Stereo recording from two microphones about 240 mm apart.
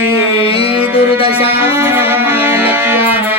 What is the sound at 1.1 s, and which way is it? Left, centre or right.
Speech, left.